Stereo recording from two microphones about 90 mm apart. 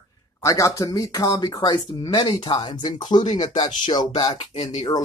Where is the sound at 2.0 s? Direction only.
60° left (ahead or behind).